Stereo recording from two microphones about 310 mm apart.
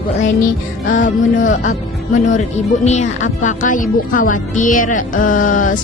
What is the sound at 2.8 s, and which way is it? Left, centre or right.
Speech, left.